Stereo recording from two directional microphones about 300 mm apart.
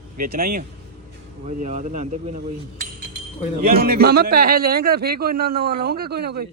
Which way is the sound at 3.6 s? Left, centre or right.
Right.